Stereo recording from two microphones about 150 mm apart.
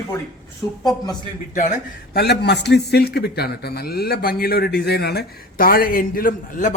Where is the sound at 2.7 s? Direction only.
90° left; by 6.8 s 60° left (ahead or behind).